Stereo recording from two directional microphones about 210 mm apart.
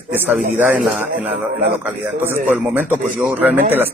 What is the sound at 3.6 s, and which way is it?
Speech, 30° right (ahead or behind).